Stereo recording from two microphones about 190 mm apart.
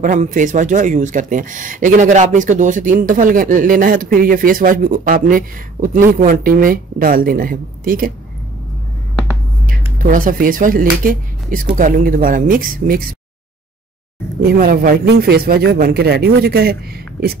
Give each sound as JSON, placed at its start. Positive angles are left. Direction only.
{"t": 0.0, "sound": "speech", "side_deg": -45}
{"t": 9.9, "sound": "speech", "side_deg": -45}
{"t": 14.4, "sound": "a man's voice", "side_deg": -50}